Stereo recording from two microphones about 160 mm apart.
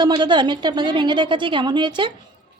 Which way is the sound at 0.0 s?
30° right (ahead or behind).